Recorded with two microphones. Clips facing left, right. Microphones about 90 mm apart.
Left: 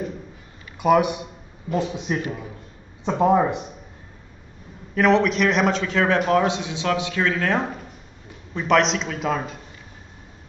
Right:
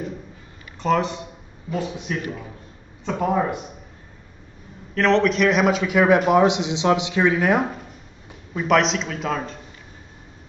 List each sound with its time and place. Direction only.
0.7 s a man's voice: 10° left (ahead or behind)
4.9 s a man's voice: 5° left (ahead or behind); by 7.6 s 15° right (ahead or behind)
8.5 s a man's voice: centre (ahead or behind)